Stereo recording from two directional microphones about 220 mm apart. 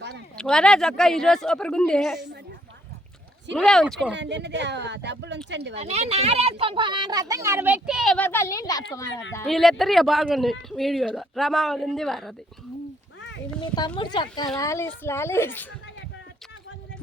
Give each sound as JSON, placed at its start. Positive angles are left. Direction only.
{"t": 0.3, "sound": "speech", "side_deg": 5}
{"t": 3.5, "sound": "speech", "side_deg": 5}
{"t": 4.1, "sound": "speech", "side_deg": -55}
{"t": 5.7, "sound": "speech", "side_deg": -30}
{"t": 9.5, "sound": "speech", "side_deg": 0}
{"t": 13.6, "sound": "a woman's voice", "side_deg": 20}